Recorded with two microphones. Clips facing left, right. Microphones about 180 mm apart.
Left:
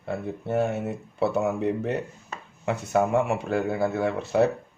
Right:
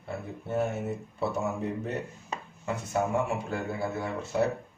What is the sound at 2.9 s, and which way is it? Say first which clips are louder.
Speech: left 6 dB; 70° left (ahead or behind).